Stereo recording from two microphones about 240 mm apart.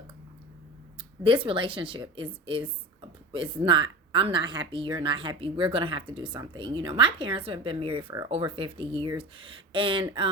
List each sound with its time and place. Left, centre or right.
1.2 s a woman's voice: right